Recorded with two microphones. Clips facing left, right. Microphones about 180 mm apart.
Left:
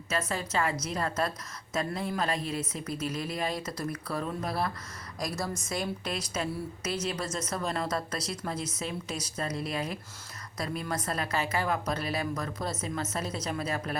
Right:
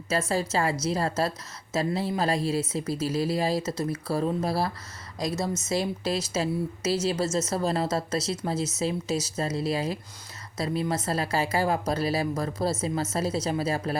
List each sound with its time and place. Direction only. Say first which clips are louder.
0.1 s a woman's voice: right 5 dB; 30° right (ahead or behind)